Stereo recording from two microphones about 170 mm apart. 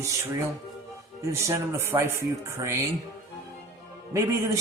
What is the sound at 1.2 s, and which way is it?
Speech, 15° right (ahead or behind).